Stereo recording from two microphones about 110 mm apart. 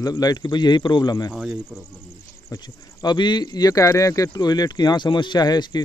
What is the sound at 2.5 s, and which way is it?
Speech, 40° left (ahead or behind).